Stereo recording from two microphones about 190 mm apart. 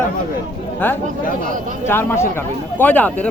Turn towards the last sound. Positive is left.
turn(degrees=10)  # may be behind; listen again after turning